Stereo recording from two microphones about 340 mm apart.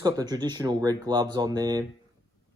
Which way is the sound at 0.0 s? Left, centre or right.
Centre.